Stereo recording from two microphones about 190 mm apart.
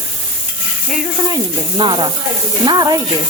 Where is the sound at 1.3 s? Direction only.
25° right (ahead or behind).